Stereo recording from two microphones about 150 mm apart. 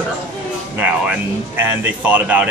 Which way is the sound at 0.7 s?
10° right (ahead or behind).